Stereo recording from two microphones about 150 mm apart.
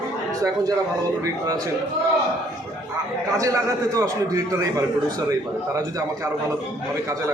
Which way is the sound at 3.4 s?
20° right (ahead or behind).